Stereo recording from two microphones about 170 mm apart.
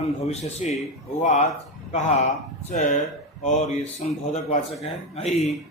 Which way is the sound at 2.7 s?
45° left (ahead or behind).